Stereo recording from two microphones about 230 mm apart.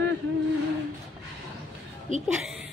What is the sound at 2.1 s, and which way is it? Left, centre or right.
Speech, right.